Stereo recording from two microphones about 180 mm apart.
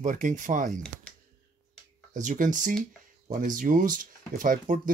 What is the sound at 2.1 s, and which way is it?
Speech, 45° right (ahead or behind).